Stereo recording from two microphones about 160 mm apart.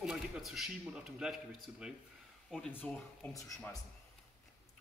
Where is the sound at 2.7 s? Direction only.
10° left (ahead or behind).